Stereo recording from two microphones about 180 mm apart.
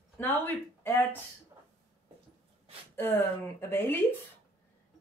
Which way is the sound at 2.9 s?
10° left (ahead or behind).